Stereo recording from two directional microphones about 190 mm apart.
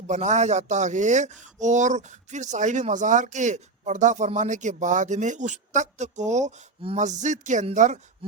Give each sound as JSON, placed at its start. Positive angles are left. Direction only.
{"t": 0.1, "sound": "speech", "side_deg": -40}